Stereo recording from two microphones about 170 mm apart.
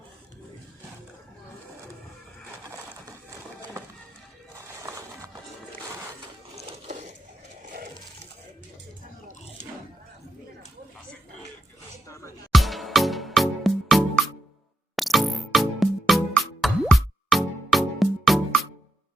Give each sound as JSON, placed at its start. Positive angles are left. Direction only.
{"t": 4.8, "sound": "a sound", "side_deg": -15}
{"t": 12.0, "sound": "music", "side_deg": 15}
{"t": 12.5, "sound": "music", "side_deg": 0}